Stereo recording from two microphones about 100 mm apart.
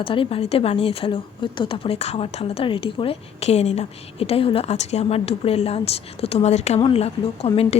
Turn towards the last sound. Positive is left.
turn(degrees=85)